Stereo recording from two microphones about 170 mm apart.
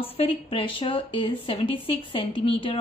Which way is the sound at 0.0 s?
35° left (ahead or behind).